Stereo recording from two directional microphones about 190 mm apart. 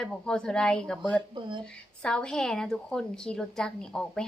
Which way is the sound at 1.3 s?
25° right (ahead or behind).